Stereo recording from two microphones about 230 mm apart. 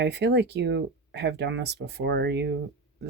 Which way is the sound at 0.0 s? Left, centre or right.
Right.